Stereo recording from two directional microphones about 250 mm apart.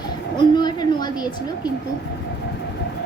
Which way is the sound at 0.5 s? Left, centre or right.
Centre.